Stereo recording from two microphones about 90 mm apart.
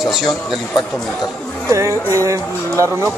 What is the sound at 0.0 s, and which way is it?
Speech, centre (ahead or behind).